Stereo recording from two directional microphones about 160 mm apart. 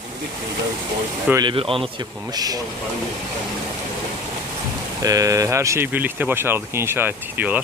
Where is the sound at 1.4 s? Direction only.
30° right (ahead or behind).